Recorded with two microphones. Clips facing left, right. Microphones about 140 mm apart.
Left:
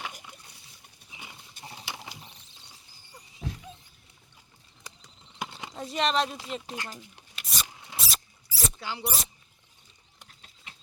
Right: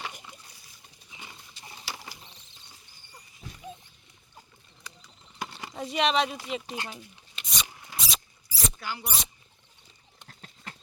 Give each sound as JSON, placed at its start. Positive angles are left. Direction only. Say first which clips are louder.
{"t": 0.1, "sound": "splash", "louder": "even", "side_deg": 0}
{"t": 1.1, "sound": "horse", "louder": "even", "side_deg": 10}
{"t": 1.8, "sound": "mechanisms", "louder": "right 1 dB", "side_deg": 20}
{"t": 3.4, "sound": "a sound", "louder": "left 9 dB", "side_deg": 70}
{"t": 5.7, "sound": "speech", "louder": "right 2 dB", "side_deg": 0}
{"t": 7.3, "sound": "a sound", "louder": "right 1 dB", "side_deg": 0}
{"t": 7.7, "sound": "mouse", "louder": "even", "side_deg": 20}
{"t": 7.9, "sound": "mouse", "louder": "right 1 dB", "side_deg": 0}
{"t": 8.8, "sound": "speech", "louder": "even", "side_deg": 25}
{"t": 9.0, "sound": "speech", "louder": "left 3 dB", "side_deg": 0}
{"t": 10.2, "sound": "a sound", "louder": "right 8 dB", "side_deg": -65}